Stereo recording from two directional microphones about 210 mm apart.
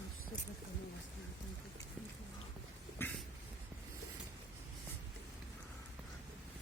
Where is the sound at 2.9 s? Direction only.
10° left (ahead or behind).